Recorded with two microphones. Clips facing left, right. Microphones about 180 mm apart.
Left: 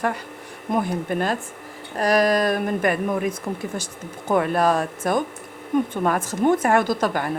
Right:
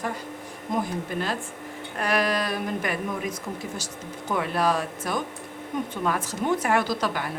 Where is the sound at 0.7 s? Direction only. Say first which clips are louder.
Left 5 dB; 55° left (ahead or behind).